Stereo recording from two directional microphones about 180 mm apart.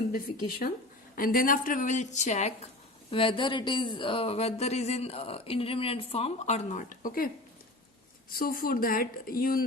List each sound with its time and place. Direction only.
0.1 s speech: 55° left (ahead or behind)
3.1 s speech: 30° left (ahead or behind); by 7.3 s 50° left (ahead or behind)
8.3 s speech: 55° left (ahead or behind)